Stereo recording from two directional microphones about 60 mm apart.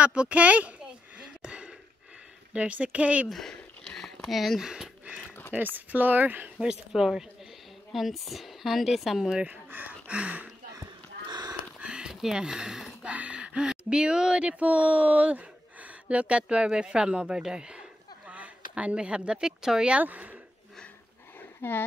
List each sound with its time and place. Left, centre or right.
0.0 s a sound: right
2.5 s speech: right
3.3 s speech: centre
5.9 s speech: right
6.6 s speech: centre
9.5 s speech: right
11.8 s speech: centre
13.0 s speech: right
20.0 s speech: right
21.4 s dog: left